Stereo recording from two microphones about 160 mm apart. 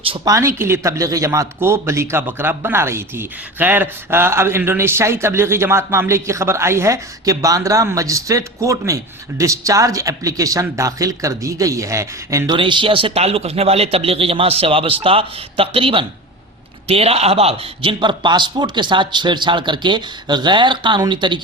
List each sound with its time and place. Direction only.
0.3 s a man's voice: 20° right (ahead or behind)
12.5 s a man's voice: 30° right (ahead or behind)